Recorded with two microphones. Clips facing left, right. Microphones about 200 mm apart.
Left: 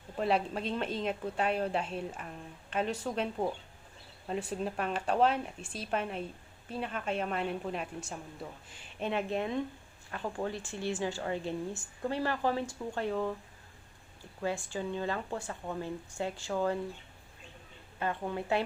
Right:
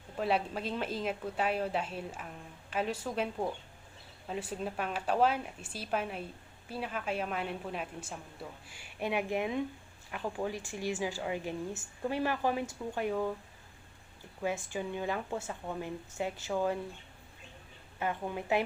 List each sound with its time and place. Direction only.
0.2 s a woman's voice: centre (ahead or behind)
4.3 s a woman's voice: 5° right (ahead or behind)
14.7 s a woman's voice: 15° right (ahead or behind)
18.0 s a woman's voice: 15° right (ahead or behind)